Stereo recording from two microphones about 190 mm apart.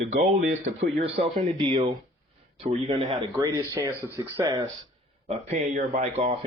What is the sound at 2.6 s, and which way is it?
Speech, 30° right (ahead or behind).